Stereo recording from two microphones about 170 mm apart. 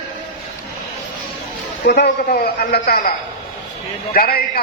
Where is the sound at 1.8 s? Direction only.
70° left (ahead or behind).